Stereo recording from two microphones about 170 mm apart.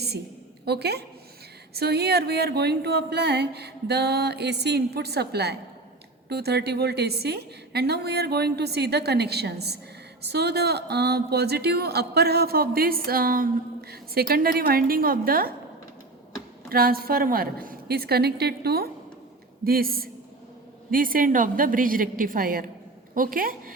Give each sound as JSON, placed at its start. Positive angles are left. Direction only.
{"t": 0.6, "sound": "a woman's voice", "side_deg": -70}
{"t": 16.6, "sound": "a woman's voice", "side_deg": -60}